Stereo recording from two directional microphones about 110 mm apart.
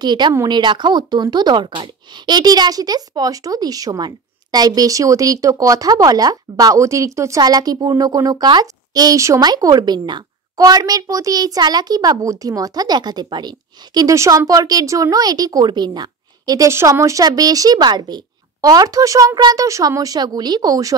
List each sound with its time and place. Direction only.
0.0 s a child's voice: 40° right (ahead or behind)